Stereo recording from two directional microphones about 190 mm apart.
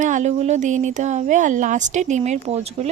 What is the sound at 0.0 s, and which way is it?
Speech, 40° right (ahead or behind).